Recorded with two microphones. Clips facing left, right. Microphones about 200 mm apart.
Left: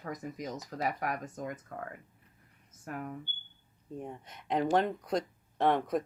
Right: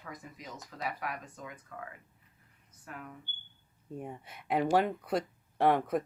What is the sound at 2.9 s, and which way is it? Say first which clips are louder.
Speech: left 7 dB; 50° left (ahead or behind).